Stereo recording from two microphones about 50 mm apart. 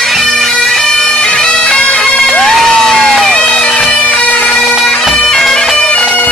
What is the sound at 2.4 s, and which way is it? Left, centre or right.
Music, centre.